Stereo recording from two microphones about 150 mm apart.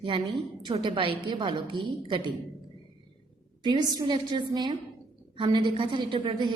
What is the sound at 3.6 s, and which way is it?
A woman's voice, 25° right (ahead or behind).